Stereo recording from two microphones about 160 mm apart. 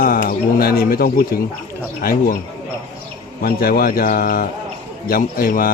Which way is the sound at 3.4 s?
70° left (ahead or behind).